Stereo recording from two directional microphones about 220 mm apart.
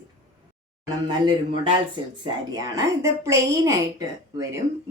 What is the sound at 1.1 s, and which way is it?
Speech, 20° right (ahead or behind).